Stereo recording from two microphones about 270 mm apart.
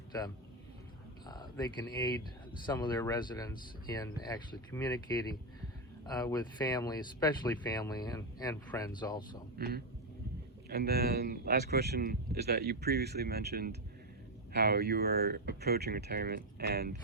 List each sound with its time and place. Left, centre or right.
1.3 s speech: centre
9.6 s speech: right